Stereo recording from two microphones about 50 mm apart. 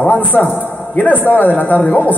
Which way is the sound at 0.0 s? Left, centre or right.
Left.